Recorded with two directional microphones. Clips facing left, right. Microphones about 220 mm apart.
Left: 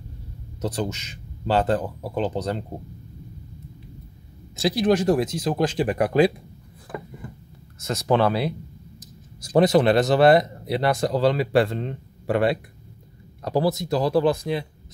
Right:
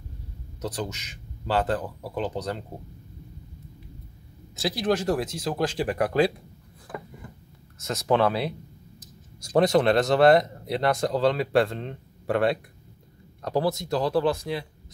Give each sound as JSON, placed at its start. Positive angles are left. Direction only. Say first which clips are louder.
{"t": 0.6, "sound": "speech", "louder": "left 5 dB", "side_deg": 25}
{"t": 4.6, "sound": "speech", "louder": "left 5 dB", "side_deg": 15}
{"t": 7.8, "sound": "speech", "louder": "left 2 dB", "side_deg": 0}